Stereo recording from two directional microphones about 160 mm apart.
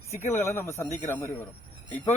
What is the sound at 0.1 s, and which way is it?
Speech, 15° left (ahead or behind).